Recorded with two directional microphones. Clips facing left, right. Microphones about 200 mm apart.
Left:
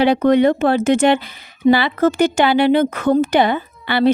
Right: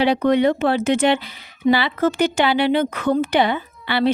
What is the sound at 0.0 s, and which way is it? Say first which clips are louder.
Speech: left 3 dB; 50° left (ahead or behind).